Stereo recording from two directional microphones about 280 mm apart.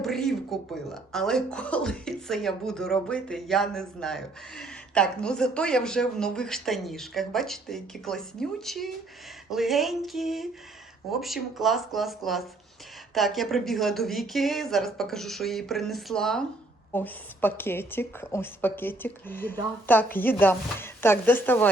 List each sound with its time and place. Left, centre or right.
0.0 s a woman's voice: centre